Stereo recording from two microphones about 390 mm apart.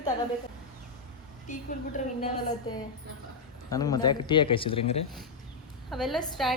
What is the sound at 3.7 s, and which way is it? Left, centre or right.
Speech, centre.